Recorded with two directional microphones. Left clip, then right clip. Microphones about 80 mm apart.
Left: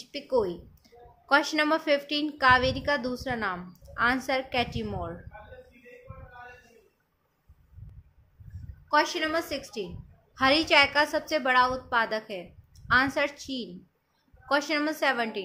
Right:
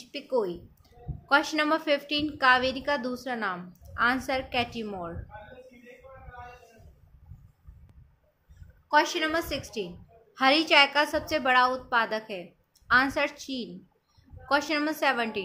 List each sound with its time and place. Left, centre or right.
0.0 s a woman's voice: centre
8.8 s a woman's voice: right
10.3 s a woman's voice: centre